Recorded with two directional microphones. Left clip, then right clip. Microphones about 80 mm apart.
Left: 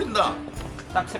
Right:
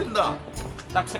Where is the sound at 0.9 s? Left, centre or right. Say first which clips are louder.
Even; right.